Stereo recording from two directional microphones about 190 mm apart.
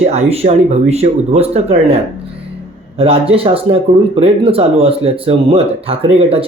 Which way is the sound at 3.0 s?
30° right (ahead or behind).